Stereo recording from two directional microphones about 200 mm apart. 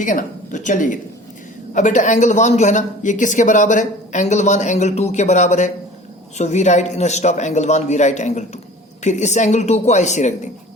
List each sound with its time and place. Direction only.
0.0 s speech: 40° left (ahead or behind)